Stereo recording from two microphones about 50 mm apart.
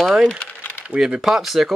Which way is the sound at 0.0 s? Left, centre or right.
Centre.